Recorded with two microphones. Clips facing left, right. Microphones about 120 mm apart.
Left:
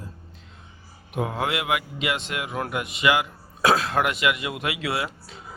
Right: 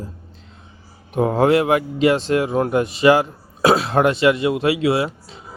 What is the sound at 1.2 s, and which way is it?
Speech, 35° right (ahead or behind).